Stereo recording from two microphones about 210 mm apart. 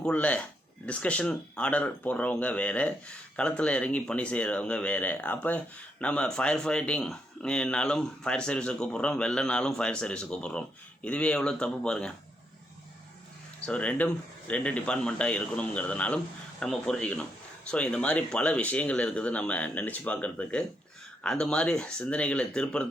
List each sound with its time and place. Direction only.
0.0 s speech: 5° left (ahead or behind)
13.7 s speech: 5° left (ahead or behind)